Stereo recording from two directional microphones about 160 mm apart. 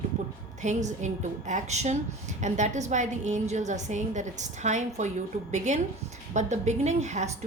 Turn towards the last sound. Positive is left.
turn(degrees=-45)  # may be behind; listen again after turning